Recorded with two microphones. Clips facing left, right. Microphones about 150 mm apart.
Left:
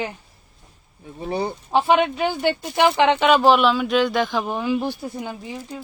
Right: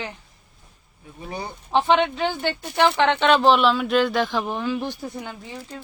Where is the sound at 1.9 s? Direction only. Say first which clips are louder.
Left 2 dB; 10° left (ahead or behind).